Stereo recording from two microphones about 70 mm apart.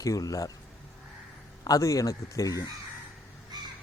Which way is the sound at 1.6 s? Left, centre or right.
Left.